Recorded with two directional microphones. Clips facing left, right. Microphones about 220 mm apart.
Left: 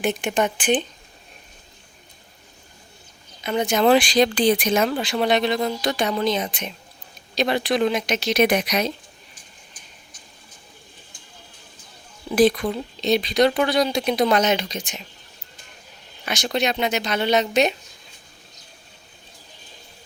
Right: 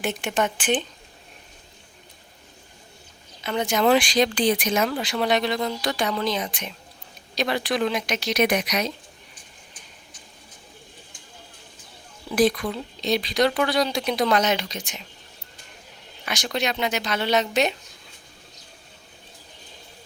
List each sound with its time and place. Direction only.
0.0 s a woman's voice: 15° left (ahead or behind)
3.4 s speech: 20° left (ahead or behind)
12.4 s speech: 25° left (ahead or behind)
16.2 s speech: 25° left (ahead or behind)